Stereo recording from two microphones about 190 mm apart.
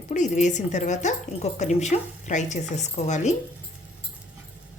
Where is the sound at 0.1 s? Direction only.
40° left (ahead or behind).